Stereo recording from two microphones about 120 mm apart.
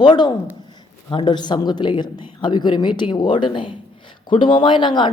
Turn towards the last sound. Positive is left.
turn(degrees=40)  # may be behind; listen again after turning